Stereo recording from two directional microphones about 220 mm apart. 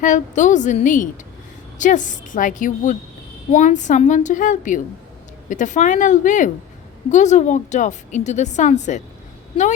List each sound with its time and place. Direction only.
0.0 s a woman's voice: 35° left (ahead or behind)